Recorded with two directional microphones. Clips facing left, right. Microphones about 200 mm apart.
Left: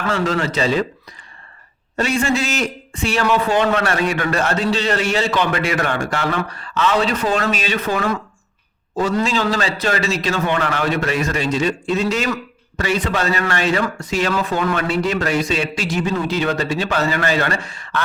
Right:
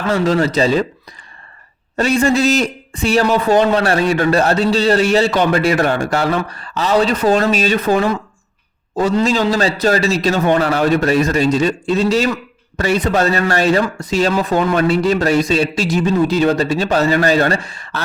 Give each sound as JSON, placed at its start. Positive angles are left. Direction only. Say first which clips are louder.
{"t": 0.1, "sound": "a man's voice", "louder": "right 6 dB", "side_deg": -35}
{"t": 2.0, "sound": "a man's voice", "louder": "right 5 dB", "side_deg": -40}